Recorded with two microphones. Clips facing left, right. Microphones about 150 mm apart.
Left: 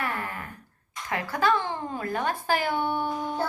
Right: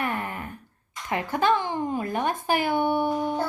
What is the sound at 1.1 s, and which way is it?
Speech, 20° right (ahead or behind).